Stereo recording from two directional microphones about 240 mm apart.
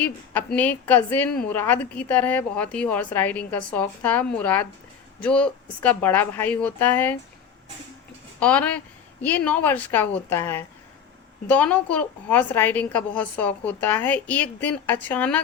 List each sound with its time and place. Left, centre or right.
0.0 s a woman's voice: centre
8.4 s a woman's voice: centre